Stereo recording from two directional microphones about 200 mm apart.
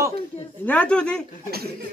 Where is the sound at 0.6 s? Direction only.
5° left (ahead or behind).